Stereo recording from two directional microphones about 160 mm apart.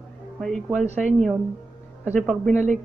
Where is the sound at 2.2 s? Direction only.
5° left (ahead or behind).